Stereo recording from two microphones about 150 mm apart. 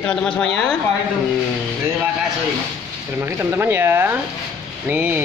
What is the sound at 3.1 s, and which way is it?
Speech, 15° right (ahead or behind).